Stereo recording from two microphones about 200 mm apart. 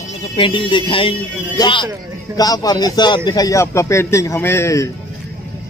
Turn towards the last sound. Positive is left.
turn(degrees=15)  # may be behind; listen again after turning